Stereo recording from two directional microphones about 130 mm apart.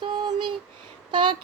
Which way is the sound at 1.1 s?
35° right (ahead or behind).